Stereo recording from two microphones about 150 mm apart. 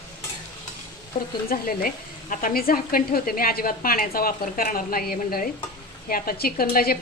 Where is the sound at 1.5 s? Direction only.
70° left (ahead or behind); by 6.9 s 85° left.